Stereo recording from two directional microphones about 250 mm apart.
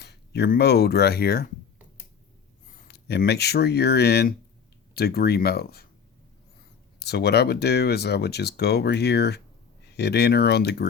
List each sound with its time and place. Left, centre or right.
0.0 s speech: left
2.6 s speech: left
7.0 s speech: left